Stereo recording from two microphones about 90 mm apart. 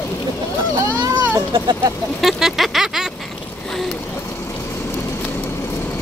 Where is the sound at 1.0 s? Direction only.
50° right (ahead or behind).